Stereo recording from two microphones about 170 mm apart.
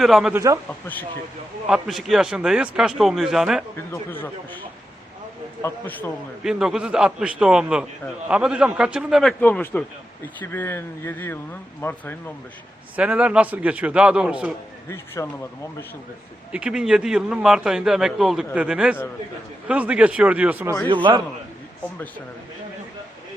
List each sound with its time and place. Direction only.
0.0 s a man's voice: centre (ahead or behind)
0.3 s a man's voice: 20° right (ahead or behind)
0.7 s speech: 10° left (ahead or behind)
1.7 s a man's voice: centre (ahead or behind)
3.8 s speech: 15° left (ahead or behind)
5.6 s speech: 10° left (ahead or behind)
6.4 s a man's voice: 5° right (ahead or behind)
9.4 s speech: 10° left (ahead or behind)
13.0 s a man's voice: 5° right (ahead or behind)
14.8 s speech: 15° left (ahead or behind)
16.5 s a man's voice: 5° right (ahead or behind)
20.8 s a man's voice: 30° right (ahead or behind)